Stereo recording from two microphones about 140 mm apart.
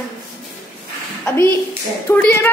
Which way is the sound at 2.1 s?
20° left (ahead or behind).